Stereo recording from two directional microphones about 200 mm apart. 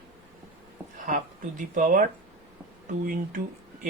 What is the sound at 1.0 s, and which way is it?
Speech, 40° right (ahead or behind).